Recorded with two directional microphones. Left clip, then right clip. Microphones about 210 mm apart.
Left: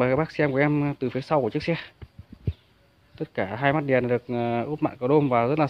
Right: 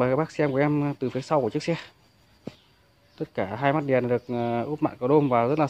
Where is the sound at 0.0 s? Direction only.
Centre (ahead or behind).